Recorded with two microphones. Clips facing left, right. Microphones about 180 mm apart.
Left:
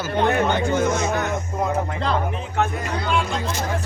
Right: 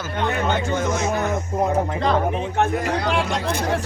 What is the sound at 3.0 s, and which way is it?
Speech, 75° right (ahead or behind).